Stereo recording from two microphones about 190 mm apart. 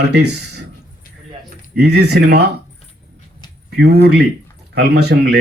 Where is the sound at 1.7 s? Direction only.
60° right (ahead or behind).